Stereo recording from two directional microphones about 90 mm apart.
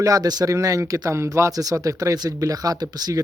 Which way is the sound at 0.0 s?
45° right (ahead or behind).